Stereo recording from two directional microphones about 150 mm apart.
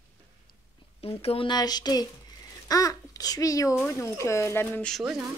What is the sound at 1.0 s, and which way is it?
A child's voice, 40° left (ahead or behind).